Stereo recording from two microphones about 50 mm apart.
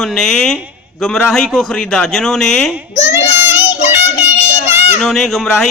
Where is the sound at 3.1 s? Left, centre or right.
Right.